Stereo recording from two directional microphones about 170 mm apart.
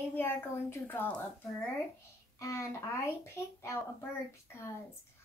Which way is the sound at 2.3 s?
20° left (ahead or behind).